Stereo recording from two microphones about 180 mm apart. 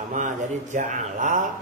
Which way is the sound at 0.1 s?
45° right (ahead or behind).